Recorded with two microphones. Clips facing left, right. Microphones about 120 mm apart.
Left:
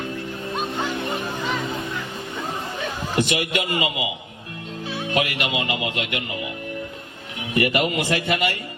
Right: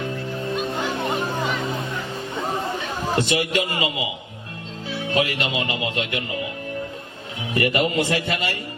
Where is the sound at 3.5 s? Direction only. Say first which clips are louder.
Right 1 dB; 20° left (ahead or behind).